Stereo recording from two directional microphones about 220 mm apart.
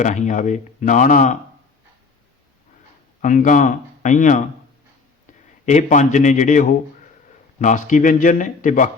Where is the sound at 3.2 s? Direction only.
35° left (ahead or behind).